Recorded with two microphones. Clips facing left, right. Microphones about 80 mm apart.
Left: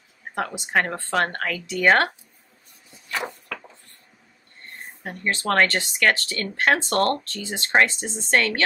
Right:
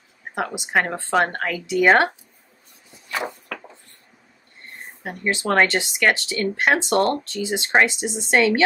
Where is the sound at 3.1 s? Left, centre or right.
Centre.